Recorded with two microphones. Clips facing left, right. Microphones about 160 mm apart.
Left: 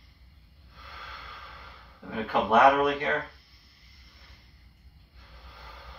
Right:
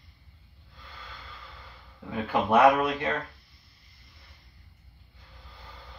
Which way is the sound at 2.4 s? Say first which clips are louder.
Even; centre (ahead or behind).